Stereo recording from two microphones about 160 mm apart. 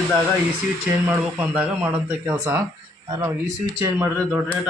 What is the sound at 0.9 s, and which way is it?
Speech, 15° right (ahead or behind).